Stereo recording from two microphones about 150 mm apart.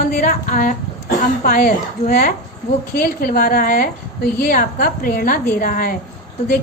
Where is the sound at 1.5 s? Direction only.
70° left (ahead or behind).